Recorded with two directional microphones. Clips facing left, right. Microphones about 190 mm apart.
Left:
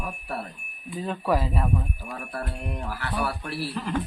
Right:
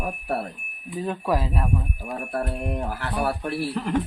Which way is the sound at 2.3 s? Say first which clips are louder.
Right 6 dB; 45° right (ahead or behind).